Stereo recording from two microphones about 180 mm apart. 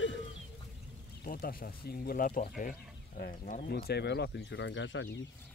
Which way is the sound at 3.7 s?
65° left (ahead or behind).